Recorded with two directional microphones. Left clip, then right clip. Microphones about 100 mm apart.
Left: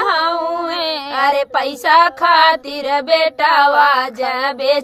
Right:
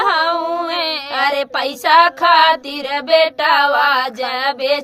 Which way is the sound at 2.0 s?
45° left (ahead or behind).